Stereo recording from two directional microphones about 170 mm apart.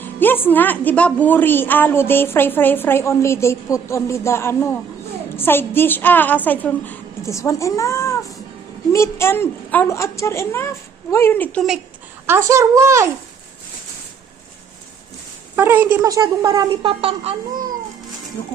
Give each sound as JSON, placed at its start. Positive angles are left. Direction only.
{"t": 0.0, "sound": "a woman's voice", "side_deg": 10}
{"t": 12.2, "sound": "a child's voice", "side_deg": -15}
{"t": 15.5, "sound": "a child's voice", "side_deg": -10}
{"t": 16.0, "sound": "speech", "side_deg": -20}